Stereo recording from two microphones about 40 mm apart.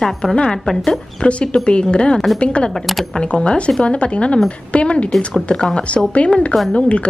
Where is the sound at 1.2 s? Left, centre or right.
Left.